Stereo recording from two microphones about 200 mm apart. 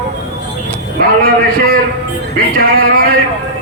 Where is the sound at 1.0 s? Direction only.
50° right (ahead or behind).